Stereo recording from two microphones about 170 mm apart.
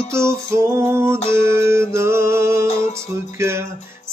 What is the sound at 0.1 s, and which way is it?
Music, 15° right (ahead or behind).